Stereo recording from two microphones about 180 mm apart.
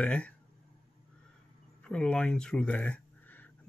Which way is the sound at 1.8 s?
5° left (ahead or behind).